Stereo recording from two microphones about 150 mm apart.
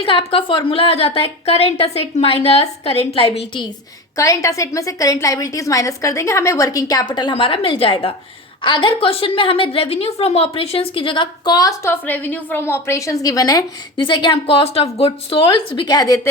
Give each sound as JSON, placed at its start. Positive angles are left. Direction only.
{"t": 0.0, "sound": "a woman's voice", "side_deg": 35}
{"t": 4.2, "sound": "a woman's voice", "side_deg": 20}